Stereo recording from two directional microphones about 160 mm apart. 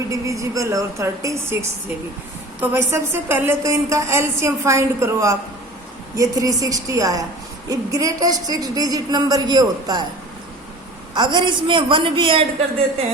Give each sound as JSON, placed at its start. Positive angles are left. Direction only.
{"t": 0.1, "sound": "a woman's voice", "side_deg": -20}
{"t": 2.6, "sound": "a woman's voice", "side_deg": -15}
{"t": 11.1, "sound": "a woman's voice", "side_deg": -30}